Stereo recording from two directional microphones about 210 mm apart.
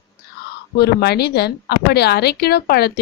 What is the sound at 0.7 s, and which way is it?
A woman's voice, 50° left (ahead or behind).